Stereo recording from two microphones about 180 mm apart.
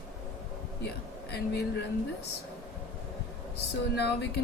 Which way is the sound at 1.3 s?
65° left (ahead or behind).